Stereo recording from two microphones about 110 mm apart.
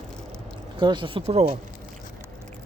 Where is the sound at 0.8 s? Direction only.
45° right (ahead or behind); by 1.6 s 60° right (ahead or behind).